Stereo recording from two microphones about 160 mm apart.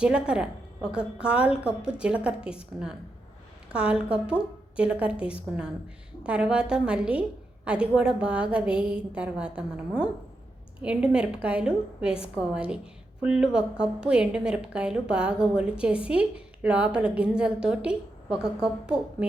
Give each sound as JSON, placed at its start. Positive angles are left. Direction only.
{"t": 0.0, "sound": "a woman's voice", "side_deg": -5}